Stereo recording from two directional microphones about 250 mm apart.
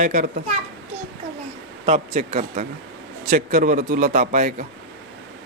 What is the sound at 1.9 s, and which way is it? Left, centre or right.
A man's voice, right.